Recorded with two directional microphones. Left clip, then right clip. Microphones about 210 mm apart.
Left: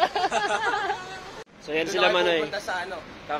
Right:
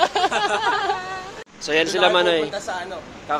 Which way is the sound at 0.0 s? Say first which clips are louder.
Right 5 dB; 10° right (ahead or behind).